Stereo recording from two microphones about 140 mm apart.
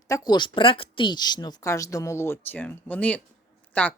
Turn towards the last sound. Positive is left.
turn(degrees=10)  # may be behind; listen again after turning